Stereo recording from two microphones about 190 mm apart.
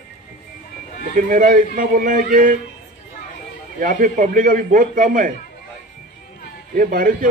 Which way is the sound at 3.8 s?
45° right (ahead or behind).